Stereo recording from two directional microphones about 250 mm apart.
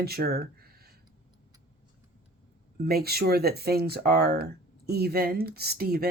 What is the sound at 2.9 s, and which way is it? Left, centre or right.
Speech, right.